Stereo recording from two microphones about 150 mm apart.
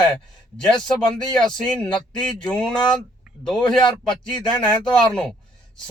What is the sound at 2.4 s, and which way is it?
Speech, 5° left (ahead or behind).